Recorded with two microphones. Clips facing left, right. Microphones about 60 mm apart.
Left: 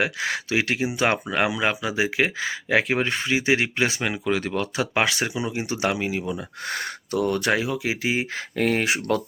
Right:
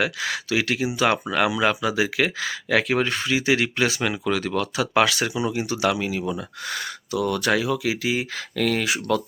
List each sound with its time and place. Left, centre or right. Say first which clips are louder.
0.0 s speech: even; left
6.7 s speech: left 2 dB; left
7.5 s speech: right 2 dB; left
8.8 s speech: even; left